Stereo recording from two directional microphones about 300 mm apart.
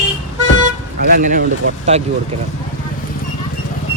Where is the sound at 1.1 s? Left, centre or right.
Right.